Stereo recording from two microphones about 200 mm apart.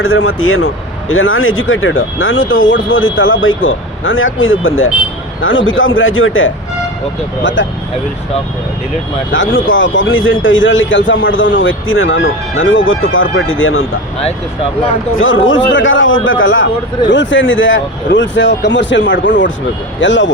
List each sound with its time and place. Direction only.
0.0 s speech: 90° left
5.4 s a man's voice: 75° left (ahead or behind)
9.6 s a man's voice: 70° left (ahead or behind)
15.7 s a man's voice: 70° left (ahead or behind)